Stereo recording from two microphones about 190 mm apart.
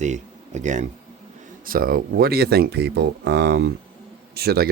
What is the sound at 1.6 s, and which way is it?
Speech, 50° right (ahead or behind).